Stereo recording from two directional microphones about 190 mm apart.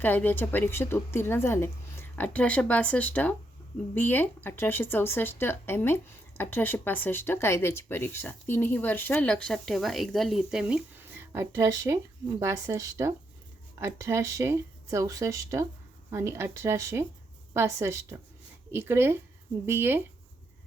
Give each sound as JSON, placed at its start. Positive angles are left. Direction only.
{"t": 0.0, "sound": "speech", "side_deg": 10}